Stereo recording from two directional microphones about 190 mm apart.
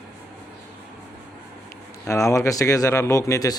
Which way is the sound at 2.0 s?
15° left (ahead or behind).